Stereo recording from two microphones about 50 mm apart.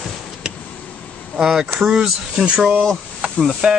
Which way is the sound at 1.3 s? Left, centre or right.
Centre.